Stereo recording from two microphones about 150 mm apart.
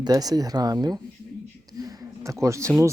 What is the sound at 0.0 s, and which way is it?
Speech, 25° right (ahead or behind).